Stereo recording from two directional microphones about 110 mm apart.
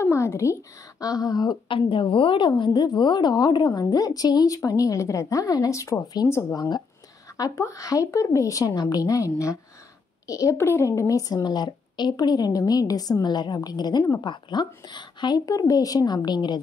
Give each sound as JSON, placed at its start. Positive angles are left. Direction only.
{"t": 0.0, "sound": "a woman's voice", "side_deg": 25}
{"t": 1.8, "sound": "a woman's voice", "side_deg": 50}